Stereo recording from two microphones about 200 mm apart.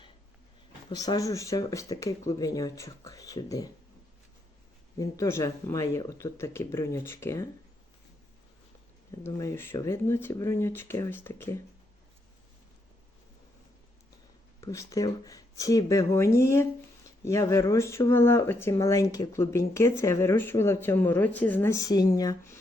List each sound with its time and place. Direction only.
0.9 s speech: 20° left (ahead or behind)
4.9 s speech: 15° left (ahead or behind)
9.2 s speech: 15° left (ahead or behind)
14.6 s speech: 15° left (ahead or behind)